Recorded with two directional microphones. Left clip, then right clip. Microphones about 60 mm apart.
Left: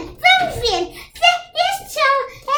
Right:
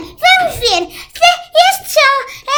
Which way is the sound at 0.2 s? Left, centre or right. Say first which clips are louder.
Right 4 dB; centre.